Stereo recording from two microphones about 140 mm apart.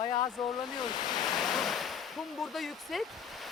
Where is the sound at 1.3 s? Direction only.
Centre (ahead or behind).